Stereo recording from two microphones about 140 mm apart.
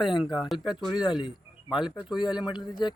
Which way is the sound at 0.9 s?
30° left (ahead or behind).